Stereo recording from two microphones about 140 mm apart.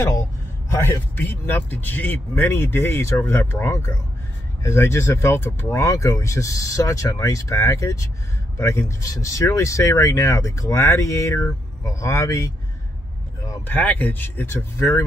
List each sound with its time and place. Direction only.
0.7 s a man's voice: 20° left (ahead or behind)
13.7 s a man's voice: 10° left (ahead or behind)